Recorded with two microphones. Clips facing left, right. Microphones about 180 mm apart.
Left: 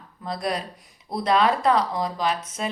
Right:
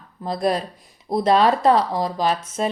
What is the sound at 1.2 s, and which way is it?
A woman's voice, 35° right (ahead or behind).